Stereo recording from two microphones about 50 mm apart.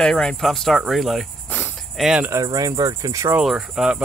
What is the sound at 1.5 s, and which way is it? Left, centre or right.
Cricket, left.